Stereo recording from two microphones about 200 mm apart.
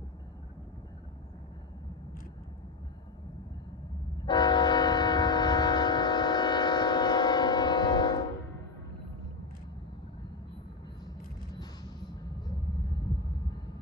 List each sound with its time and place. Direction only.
4.3 s train: 20° left (ahead or behind)
12.4 s vehicle: 20° left (ahead or behind)